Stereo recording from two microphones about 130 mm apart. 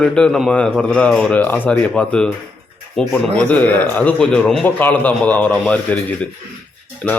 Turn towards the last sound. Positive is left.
turn(degrees=5)  # may be behind; listen again after turning